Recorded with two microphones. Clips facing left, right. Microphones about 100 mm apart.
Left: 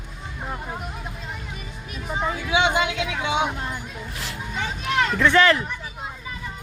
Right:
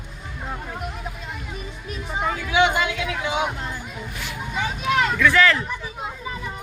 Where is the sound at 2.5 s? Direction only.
20° left (ahead or behind).